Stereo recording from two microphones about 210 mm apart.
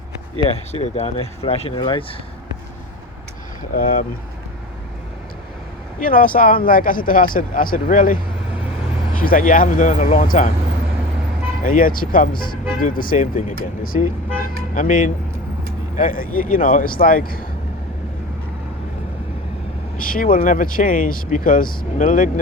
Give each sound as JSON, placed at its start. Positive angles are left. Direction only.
{"t": 0.7, "sound": "speech", "side_deg": 30}
{"t": 3.7, "sound": "speech", "side_deg": 40}
{"t": 6.0, "sound": "speech", "side_deg": 40}
{"t": 11.6, "sound": "speech", "side_deg": 40}
{"t": 20.0, "sound": "speech", "side_deg": 40}